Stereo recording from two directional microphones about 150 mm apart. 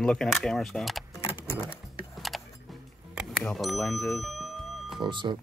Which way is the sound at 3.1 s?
Centre (ahead or behind).